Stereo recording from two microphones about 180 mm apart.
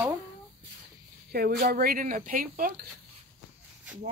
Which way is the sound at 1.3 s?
55° right (ahead or behind).